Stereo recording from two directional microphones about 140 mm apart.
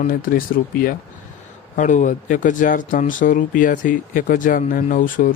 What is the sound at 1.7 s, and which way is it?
Speech, 65° left (ahead or behind).